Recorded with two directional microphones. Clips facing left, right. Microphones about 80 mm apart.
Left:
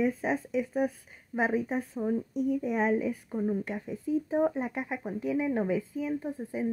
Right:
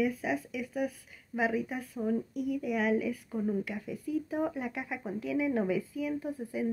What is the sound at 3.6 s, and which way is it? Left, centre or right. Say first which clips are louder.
A woman's voice: left 3 dB; left.